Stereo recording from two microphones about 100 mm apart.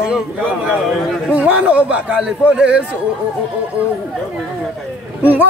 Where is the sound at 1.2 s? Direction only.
15° right (ahead or behind).